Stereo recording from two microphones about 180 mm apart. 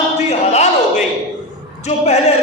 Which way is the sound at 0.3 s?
40° left (ahead or behind).